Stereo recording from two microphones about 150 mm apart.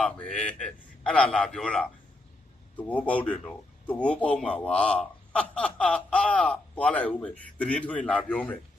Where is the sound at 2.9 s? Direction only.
10° left (ahead or behind).